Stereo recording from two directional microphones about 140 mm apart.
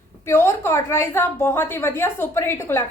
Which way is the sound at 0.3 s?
20° left (ahead or behind).